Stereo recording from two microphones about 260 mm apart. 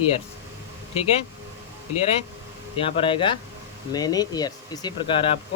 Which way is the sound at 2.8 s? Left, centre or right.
Centre.